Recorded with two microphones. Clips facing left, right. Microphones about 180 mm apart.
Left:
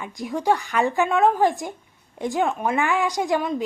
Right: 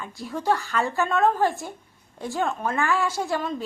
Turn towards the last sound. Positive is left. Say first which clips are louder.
# left 4 dB
turn(degrees=15)  # may be behind; listen again after turning